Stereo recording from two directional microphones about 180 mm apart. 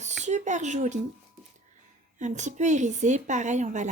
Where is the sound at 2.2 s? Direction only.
40° right (ahead or behind).